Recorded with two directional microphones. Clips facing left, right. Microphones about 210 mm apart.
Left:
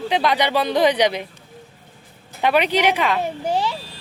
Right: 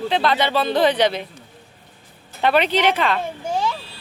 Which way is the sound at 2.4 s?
10° left (ahead or behind).